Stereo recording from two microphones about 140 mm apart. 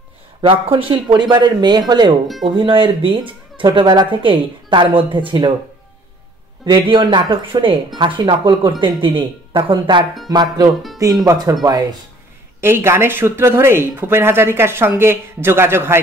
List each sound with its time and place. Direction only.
0.4 s speech: 40° right (ahead or behind)
6.6 s speech: 35° right (ahead or behind)
12.5 s speech: 15° right (ahead or behind)